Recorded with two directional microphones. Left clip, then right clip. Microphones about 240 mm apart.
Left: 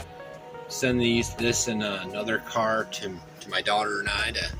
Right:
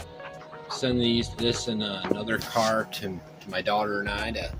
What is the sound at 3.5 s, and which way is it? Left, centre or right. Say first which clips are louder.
Speech: left 1 dB; right.